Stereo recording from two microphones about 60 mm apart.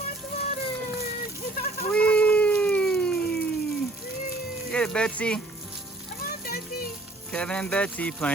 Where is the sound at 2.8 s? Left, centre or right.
Centre.